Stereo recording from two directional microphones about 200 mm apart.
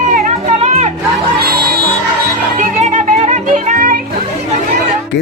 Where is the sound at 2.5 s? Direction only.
35° right (ahead or behind).